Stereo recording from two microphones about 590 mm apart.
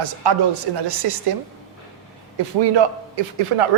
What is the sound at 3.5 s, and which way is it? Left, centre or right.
Speech, right.